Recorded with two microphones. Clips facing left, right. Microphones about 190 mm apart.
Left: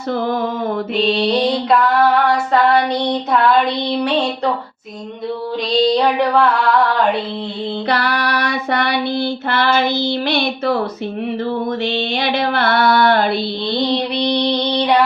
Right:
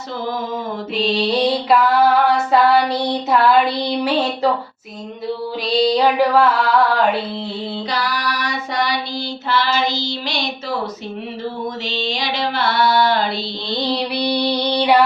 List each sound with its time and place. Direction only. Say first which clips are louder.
1.3 s female singing: left 1 dB; 5° right (ahead or behind)
5.7 s female singing: left 1 dB; 5° right (ahead or behind)
7.9 s female singing: left 5 dB; 60° left (ahead or behind)
11.9 s female singing: left 4 dB; 60° left (ahead or behind)
13.9 s female singing: left 2 dB; 5° right (ahead or behind)